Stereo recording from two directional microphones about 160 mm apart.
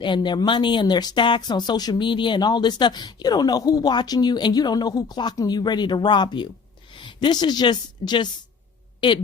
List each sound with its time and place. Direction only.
0.0 s a woman's voice: 30° left (ahead or behind)